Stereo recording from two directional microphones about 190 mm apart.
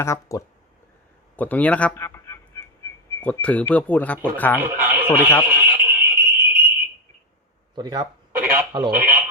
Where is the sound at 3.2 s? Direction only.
5° left (ahead or behind).